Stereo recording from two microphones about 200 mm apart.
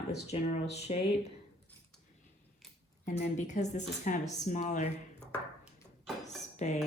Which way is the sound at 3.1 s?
35° left (ahead or behind).